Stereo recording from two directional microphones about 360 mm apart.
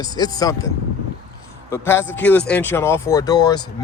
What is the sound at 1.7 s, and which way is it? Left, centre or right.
Speech, centre.